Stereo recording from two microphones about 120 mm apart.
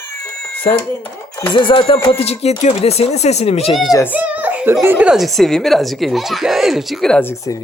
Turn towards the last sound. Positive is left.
turn(degrees=20)  # may be behind; listen again after turning